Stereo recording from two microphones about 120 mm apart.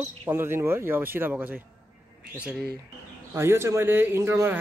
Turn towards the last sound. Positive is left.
turn(degrees=-20)  # may be behind; listen again after turning